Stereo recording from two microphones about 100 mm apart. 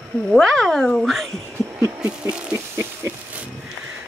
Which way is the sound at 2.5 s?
30° right (ahead or behind).